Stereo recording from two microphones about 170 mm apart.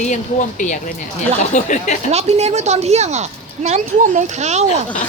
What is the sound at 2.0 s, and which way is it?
Speech, 40° right (ahead or behind).